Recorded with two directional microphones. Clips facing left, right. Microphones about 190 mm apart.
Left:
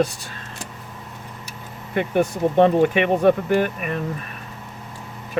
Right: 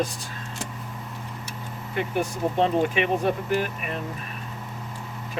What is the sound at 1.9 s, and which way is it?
Speech, 65° left (ahead or behind).